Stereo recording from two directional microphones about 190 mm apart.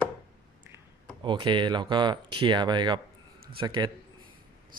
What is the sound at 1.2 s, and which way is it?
Speech, 25° right (ahead or behind).